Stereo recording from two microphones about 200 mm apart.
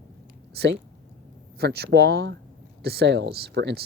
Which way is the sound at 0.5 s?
55° right (ahead or behind).